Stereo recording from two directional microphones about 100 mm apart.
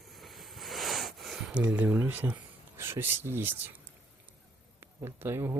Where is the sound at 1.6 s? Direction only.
15° right (ahead or behind).